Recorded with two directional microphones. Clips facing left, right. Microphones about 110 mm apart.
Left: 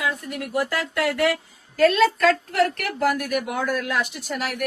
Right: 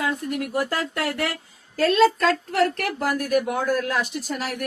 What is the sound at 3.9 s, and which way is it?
Speech, 40° right (ahead or behind).